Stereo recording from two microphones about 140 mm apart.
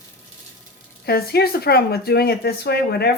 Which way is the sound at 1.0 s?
90° left.